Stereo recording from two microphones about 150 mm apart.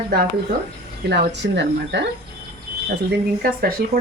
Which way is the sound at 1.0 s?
90° right.